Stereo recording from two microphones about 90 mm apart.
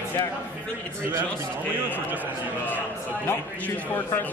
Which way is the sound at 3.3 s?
25° left (ahead or behind).